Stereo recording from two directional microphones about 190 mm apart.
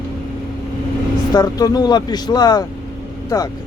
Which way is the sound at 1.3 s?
20° left (ahead or behind).